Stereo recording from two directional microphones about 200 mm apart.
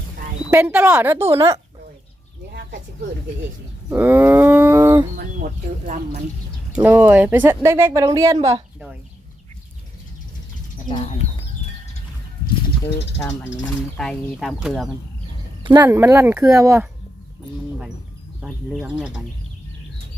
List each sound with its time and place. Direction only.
0.5 s speech: 10° right (ahead or behind)
2.5 s speech: 50° right (ahead or behind)
3.8 s speech: 10° right (ahead or behind)
5.1 s speech: 40° right (ahead or behind)
6.7 s speech: 10° right (ahead or behind)
10.8 s speech: 30° left (ahead or behind)
13.9 s speech: 5° left (ahead or behind)
15.8 s speech: 10° right (ahead or behind)
18.3 s speech: centre (ahead or behind)